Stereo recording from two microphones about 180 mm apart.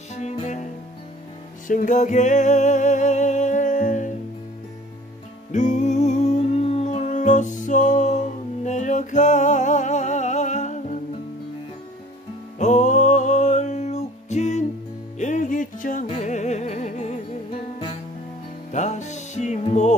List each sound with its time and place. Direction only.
0.1 s music: 40° left (ahead or behind)
1.7 s music: 45° left (ahead or behind)
5.5 s humming: 40° left (ahead or behind)
12.5 s music: 40° left (ahead or behind)
18.7 s music: 40° left (ahead or behind)